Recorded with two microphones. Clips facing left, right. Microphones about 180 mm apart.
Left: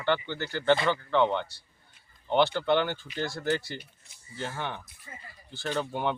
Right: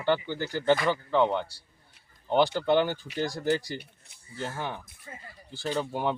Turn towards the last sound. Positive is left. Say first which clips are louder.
# right 1 dB
turn(degrees=-5)  # may be behind; listen again after turning